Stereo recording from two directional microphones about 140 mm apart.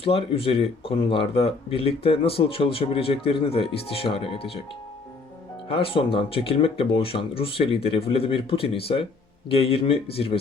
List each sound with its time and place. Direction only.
0.0 s speech: 40° left (ahead or behind)
5.6 s speech: 40° left (ahead or behind)